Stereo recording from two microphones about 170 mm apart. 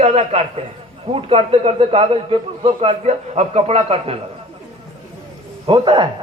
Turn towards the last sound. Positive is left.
turn(degrees=-30)  # may be behind; listen again after turning